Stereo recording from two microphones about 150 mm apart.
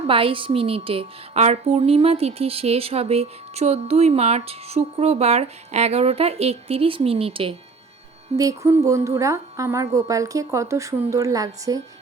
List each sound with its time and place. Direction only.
0.1 s a woman's voice: 35° right (ahead or behind)
8.4 s speech: 20° right (ahead or behind)